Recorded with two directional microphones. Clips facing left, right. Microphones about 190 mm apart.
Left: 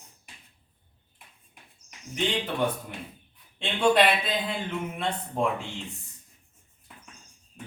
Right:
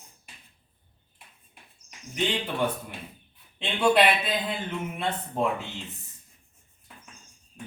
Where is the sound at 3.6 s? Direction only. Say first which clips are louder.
Even; 5° right (ahead or behind).